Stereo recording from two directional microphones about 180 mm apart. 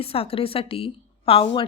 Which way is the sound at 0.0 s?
30° left (ahead or behind).